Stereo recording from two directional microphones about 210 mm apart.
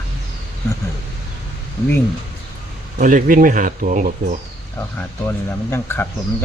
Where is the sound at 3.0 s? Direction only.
40° right (ahead or behind).